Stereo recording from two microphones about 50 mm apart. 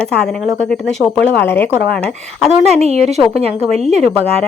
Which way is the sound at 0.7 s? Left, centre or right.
Centre.